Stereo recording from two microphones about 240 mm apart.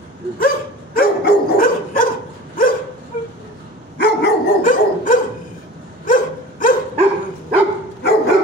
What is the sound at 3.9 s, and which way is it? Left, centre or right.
Dog, left.